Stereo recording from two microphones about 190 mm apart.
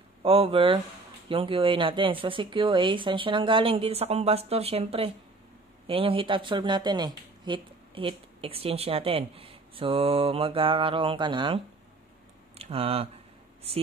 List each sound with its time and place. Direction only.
0.2 s speech: 30° right (ahead or behind)